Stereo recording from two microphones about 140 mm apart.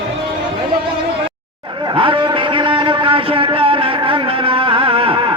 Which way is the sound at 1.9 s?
35° right (ahead or behind).